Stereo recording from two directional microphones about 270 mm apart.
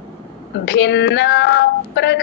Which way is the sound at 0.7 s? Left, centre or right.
Left.